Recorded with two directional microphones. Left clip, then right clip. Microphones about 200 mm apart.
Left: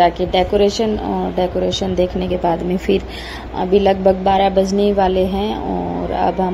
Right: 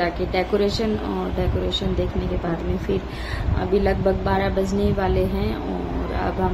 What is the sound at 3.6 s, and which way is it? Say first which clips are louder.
A woman's voice: left 8 dB; 25° left (ahead or behind).